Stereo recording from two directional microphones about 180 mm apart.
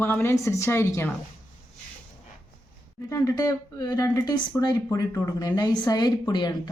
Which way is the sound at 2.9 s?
15° left (ahead or behind).